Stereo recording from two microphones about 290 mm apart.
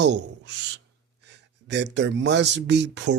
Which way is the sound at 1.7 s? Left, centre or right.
Right.